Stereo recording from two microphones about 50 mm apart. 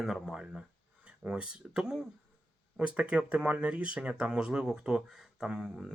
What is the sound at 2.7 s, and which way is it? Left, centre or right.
Speech, right.